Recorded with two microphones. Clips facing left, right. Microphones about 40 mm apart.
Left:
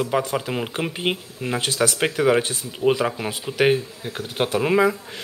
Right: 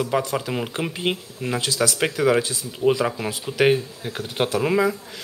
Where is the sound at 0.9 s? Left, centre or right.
Left.